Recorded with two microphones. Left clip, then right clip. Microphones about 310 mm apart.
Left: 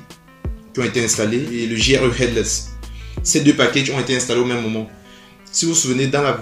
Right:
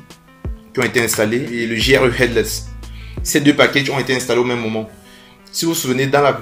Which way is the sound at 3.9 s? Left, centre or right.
Right.